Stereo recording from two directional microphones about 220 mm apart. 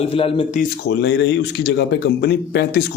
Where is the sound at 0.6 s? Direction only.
50° left (ahead or behind).